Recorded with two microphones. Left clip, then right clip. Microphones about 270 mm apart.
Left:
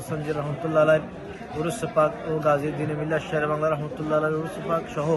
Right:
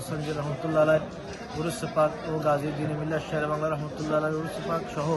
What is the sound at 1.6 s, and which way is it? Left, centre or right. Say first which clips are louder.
A man's voice: left 3 dB; centre.